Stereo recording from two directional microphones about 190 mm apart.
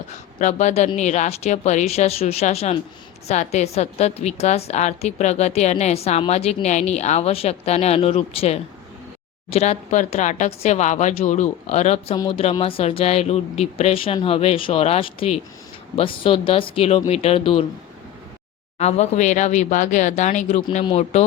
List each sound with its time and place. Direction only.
0.3 s a woman's voice: 40° left (ahead or behind)
12.1 s a woman's voice: 25° left (ahead or behind)
18.8 s a woman's voice: 35° left (ahead or behind)